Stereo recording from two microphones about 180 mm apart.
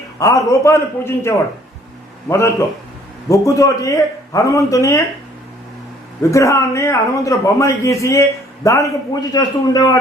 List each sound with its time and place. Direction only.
0.2 s a man's voice: 20° left (ahead or behind)
6.3 s a man's voice: 15° left (ahead or behind)